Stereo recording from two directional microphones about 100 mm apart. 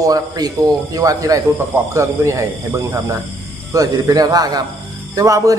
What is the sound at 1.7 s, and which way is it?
Speech, 30° right (ahead or behind).